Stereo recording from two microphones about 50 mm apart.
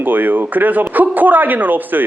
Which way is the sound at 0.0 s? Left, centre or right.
Right.